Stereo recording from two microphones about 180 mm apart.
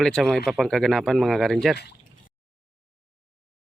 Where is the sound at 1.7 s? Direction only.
65° left (ahead or behind).